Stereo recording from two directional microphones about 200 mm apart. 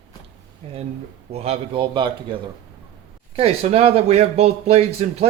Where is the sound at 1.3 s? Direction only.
30° right (ahead or behind).